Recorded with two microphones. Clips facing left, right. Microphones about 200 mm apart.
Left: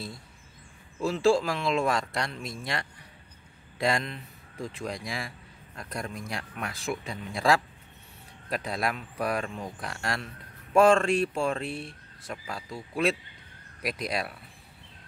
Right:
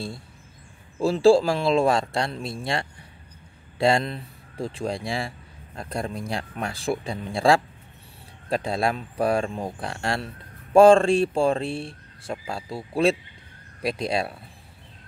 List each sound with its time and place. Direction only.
1.0 s speech: 30° right (ahead or behind)